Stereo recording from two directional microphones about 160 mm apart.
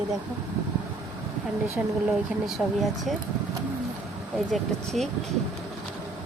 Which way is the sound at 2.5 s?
Centre (ahead or behind).